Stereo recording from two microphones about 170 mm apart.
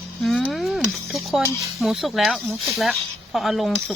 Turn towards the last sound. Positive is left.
turn(degrees=0)  # may be behind; listen again after turning